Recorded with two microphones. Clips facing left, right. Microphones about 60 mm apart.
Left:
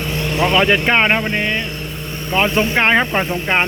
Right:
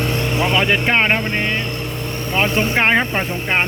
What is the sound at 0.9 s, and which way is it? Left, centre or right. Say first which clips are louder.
Speech: even; centre.